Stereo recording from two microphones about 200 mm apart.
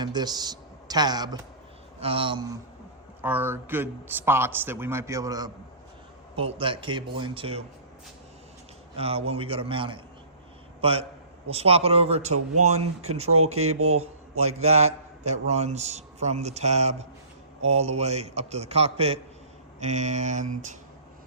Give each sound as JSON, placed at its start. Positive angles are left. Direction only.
{"t": 0.0, "sound": "speech", "side_deg": -20}
{"t": 3.2, "sound": "a man's voice", "side_deg": -10}
{"t": 9.0, "sound": "a man's voice", "side_deg": -30}